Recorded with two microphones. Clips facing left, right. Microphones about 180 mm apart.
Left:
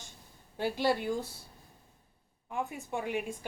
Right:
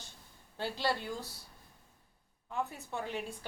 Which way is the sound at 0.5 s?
15° left (ahead or behind).